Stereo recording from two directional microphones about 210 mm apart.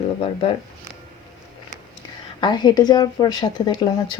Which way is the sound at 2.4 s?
20° left (ahead or behind).